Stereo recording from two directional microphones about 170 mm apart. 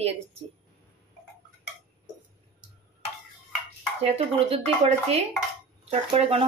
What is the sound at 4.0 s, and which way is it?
A woman's voice, 35° right (ahead or behind).